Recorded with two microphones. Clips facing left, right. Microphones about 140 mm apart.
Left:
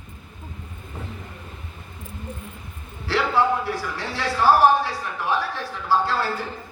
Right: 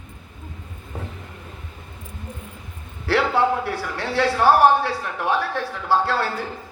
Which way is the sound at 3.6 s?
60° right (ahead or behind).